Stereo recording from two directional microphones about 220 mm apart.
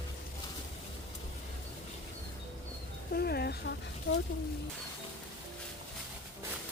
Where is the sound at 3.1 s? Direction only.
45° left (ahead or behind).